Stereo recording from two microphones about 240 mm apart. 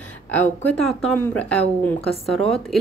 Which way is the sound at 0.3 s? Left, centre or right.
Centre.